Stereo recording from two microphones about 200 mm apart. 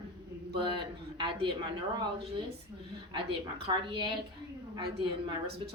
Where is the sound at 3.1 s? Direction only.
25° right (ahead or behind).